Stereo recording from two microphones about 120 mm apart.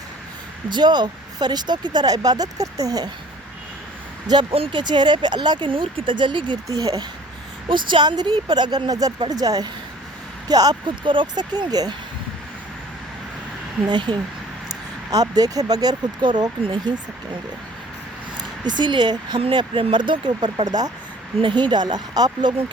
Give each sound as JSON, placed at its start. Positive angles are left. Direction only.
{"t": 0.7, "sound": "speech", "side_deg": -40}
{"t": 4.5, "sound": "speech", "side_deg": -45}
{"t": 6.7, "sound": "speech", "side_deg": -30}
{"t": 7.7, "sound": "speech", "side_deg": -45}
{"t": 13.9, "sound": "speech", "side_deg": -40}
{"t": 18.3, "sound": "speech", "side_deg": -40}